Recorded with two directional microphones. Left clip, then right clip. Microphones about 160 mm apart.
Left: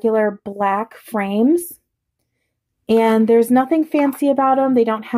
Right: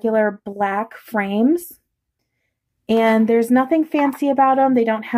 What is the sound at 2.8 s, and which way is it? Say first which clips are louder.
Speech: left 2 dB; 25° left (ahead or behind).